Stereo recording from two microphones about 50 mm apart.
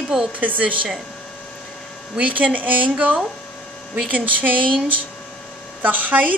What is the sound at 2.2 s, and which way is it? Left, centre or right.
Speech, right.